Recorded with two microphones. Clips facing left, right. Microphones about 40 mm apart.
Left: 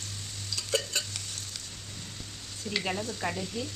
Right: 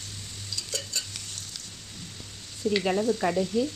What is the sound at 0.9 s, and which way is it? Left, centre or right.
Stir, left.